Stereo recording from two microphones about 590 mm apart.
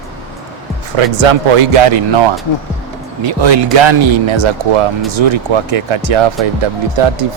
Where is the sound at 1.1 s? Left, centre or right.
Right.